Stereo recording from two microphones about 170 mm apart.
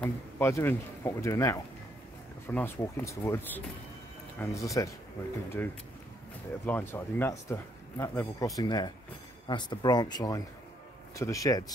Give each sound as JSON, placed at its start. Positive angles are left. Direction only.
{"t": 0.0, "sound": "speech", "side_deg": 15}